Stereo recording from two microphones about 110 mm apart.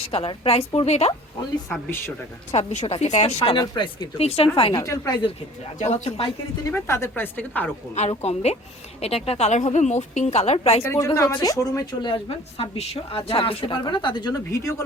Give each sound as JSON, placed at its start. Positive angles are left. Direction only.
{"t": 0.0, "sound": "speech", "side_deg": 55}
{"t": 2.5, "sound": "speech", "side_deg": 90}
{"t": 2.8, "sound": "speech", "side_deg": 70}
{"t": 3.5, "sound": "speech", "side_deg": 45}
{"t": 4.2, "sound": "speech", "side_deg": 65}
{"t": 4.7, "sound": "a woman's voice", "side_deg": 35}
{"t": 5.8, "sound": "speech", "side_deg": 75}
{"t": 6.7, "sound": "speech", "side_deg": 25}
{"t": 8.2, "sound": "speech", "side_deg": 75}
{"t": 9.0, "sound": "speech", "side_deg": 65}
{"t": 10.8, "sound": "a woman's voice", "side_deg": 30}
{"t": 12.0, "sound": "speech", "side_deg": 55}
{"t": 12.7, "sound": "speech", "side_deg": 65}
{"t": 14.5, "sound": "speech", "side_deg": 25}